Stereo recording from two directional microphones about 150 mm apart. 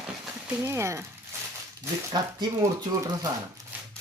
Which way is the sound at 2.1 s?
30° right (ahead or behind).